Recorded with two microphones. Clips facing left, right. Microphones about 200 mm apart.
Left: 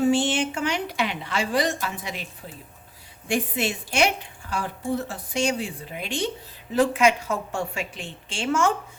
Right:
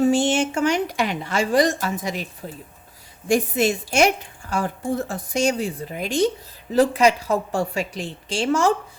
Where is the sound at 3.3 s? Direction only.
45° right (ahead or behind).